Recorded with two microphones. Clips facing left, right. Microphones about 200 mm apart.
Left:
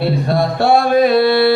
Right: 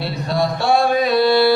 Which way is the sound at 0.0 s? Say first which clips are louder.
Left 5 dB; 55° left (ahead or behind).